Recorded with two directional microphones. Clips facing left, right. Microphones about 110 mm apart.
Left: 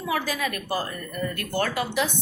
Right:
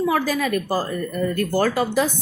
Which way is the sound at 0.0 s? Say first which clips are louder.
Right 6 dB; 45° right (ahead or behind).